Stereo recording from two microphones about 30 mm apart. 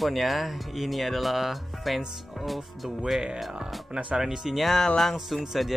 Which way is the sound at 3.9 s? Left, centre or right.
Right.